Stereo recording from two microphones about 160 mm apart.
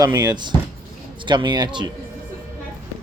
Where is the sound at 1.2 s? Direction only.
30° right (ahead or behind).